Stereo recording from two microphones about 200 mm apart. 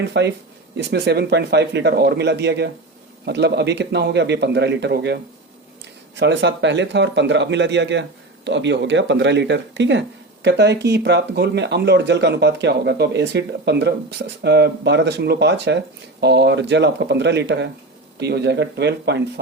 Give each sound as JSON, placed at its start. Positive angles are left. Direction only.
{"t": 0.1, "sound": "speech", "side_deg": -60}